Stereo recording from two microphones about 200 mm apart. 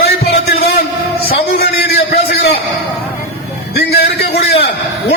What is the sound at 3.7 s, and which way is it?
Speech, 50° left (ahead or behind).